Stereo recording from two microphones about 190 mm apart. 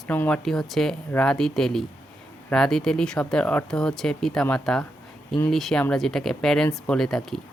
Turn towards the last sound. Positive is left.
turn(degrees=0)  # may be behind; listen again after turning